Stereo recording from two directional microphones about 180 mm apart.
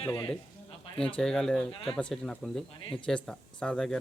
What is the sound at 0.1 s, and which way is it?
Speech, 10° left (ahead or behind).